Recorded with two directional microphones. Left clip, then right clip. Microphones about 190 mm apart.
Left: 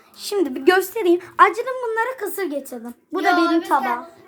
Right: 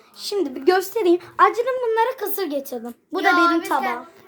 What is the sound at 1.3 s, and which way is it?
A woman's voice, 5° right (ahead or behind).